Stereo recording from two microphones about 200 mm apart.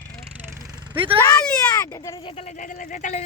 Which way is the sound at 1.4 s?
15° left (ahead or behind).